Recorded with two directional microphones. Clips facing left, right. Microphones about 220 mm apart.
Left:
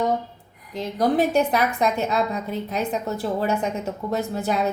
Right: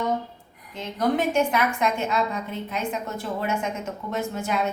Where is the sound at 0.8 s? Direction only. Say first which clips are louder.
Left 3 dB; 35° left (ahead or behind).